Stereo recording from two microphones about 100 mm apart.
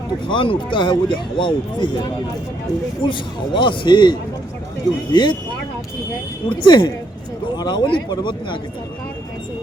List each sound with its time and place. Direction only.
0.3 s speech: 55° left (ahead or behind)
6.5 s speech: 55° left (ahead or behind)